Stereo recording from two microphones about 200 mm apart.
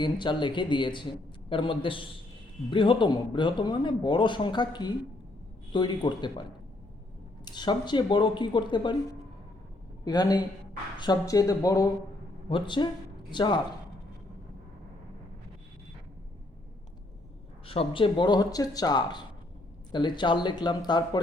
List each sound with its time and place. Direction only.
0.0 s a man's voice: 25° left (ahead or behind)
7.4 s a man's voice: 20° left (ahead or behind)
17.7 s a man's voice: 25° left (ahead or behind)